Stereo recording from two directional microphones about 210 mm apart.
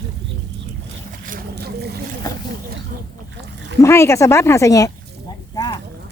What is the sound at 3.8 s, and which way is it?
Speech, 15° left (ahead or behind).